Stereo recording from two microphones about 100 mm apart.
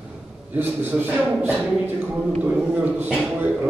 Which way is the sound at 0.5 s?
20° right (ahead or behind).